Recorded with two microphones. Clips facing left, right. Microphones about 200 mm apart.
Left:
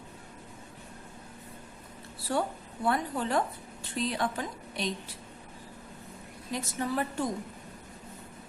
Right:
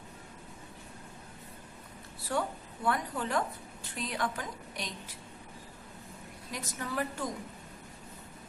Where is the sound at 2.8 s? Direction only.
30° left (ahead or behind).